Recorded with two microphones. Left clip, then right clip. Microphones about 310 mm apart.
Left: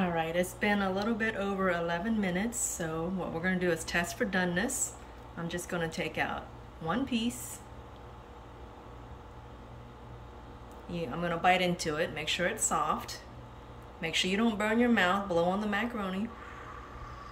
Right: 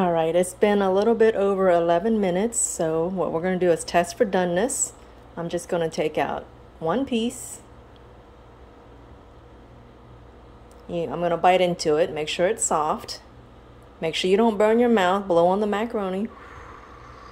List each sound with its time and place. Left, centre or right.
0.0 s a woman's voice: centre
10.9 s a woman's voice: centre